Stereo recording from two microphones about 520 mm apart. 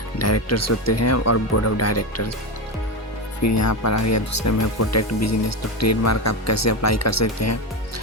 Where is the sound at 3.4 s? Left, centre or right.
Left.